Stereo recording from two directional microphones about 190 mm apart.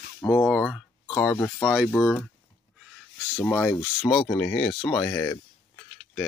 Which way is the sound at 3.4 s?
10° left (ahead or behind).